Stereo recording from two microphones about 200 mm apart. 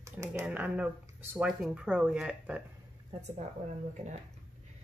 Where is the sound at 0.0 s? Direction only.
15° right (ahead or behind).